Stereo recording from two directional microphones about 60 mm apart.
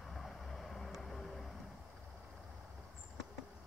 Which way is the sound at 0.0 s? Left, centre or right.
Centre.